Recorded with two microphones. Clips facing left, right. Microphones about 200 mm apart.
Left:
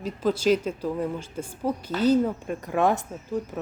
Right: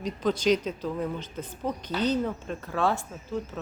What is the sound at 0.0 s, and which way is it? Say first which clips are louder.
A woman's voice: left 2 dB; 5° left (ahead or behind).